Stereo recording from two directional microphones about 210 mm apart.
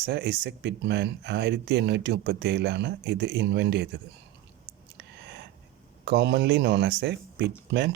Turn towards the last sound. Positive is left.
turn(degrees=-55)  # may be behind; listen again after turning